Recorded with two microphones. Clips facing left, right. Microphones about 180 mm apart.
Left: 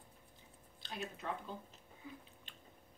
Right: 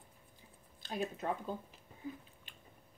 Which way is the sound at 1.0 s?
45° right (ahead or behind).